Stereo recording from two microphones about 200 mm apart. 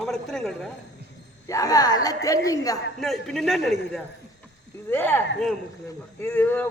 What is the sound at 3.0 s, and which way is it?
A man's voice, centre (ahead or behind).